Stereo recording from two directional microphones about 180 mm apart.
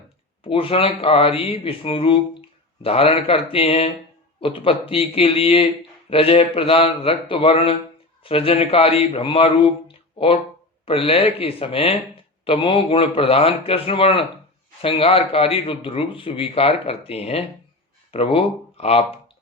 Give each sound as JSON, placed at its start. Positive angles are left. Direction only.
{"t": 0.4, "sound": "a man's voice", "side_deg": 30}
{"t": 10.8, "sound": "a man's voice", "side_deg": 30}